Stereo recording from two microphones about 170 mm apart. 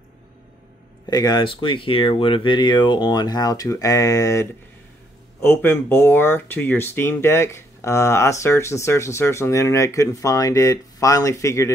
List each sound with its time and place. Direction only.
1.1 s speech: 25° left (ahead or behind)